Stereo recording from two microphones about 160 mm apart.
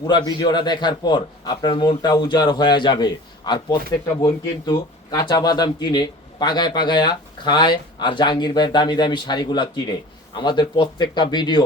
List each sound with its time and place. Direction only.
0.0 s speech: 25° left (ahead or behind)